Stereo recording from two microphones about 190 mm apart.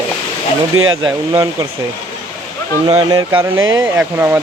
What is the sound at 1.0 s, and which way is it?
Speech, 15° right (ahead or behind).